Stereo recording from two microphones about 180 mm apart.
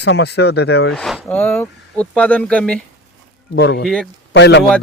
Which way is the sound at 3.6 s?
65° left (ahead or behind).